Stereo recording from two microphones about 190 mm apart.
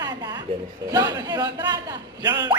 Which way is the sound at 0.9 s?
20° right (ahead or behind).